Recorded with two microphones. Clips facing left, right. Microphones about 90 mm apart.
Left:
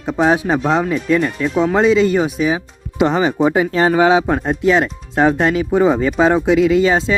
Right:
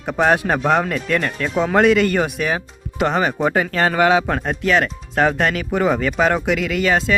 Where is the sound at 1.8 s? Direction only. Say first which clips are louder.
Left 1 dB; 65° right (ahead or behind).